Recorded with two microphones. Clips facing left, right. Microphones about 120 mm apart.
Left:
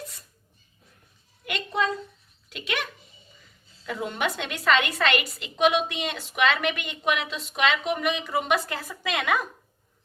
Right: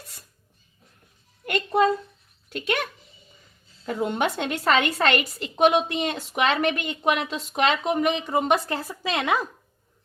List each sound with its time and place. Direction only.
1.5 s a sound: 45° right (ahead or behind)
3.8 s a woman's voice: 35° right (ahead or behind)
9.1 s speech: 25° right (ahead or behind)